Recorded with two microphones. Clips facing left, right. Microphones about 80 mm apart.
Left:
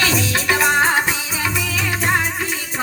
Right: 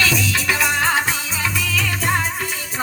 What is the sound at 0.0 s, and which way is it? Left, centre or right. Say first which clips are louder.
Music: left 1 dB; left.